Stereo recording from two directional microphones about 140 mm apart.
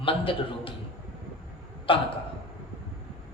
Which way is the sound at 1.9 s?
40° left (ahead or behind).